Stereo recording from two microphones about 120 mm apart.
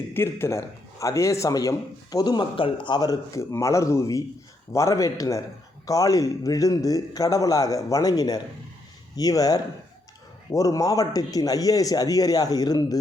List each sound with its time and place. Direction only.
0.1 s a man's voice: 20° left (ahead or behind)